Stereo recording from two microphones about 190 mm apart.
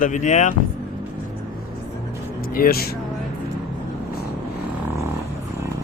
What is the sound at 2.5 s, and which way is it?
Speech, 50° left (ahead or behind).